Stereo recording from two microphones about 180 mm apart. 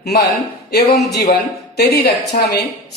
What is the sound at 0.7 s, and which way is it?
A woman's voice, 65° left (ahead or behind).